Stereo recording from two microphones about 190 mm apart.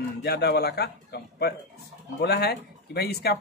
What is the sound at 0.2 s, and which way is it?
Speech, 60° left (ahead or behind).